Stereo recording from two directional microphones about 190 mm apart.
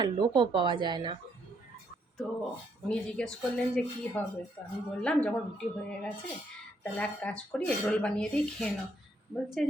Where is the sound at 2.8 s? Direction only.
5° left (ahead or behind).